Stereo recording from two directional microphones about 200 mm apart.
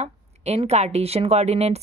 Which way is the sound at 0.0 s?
35° right (ahead or behind).